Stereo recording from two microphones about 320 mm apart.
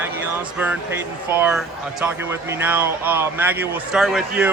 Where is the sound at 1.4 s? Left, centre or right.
Centre.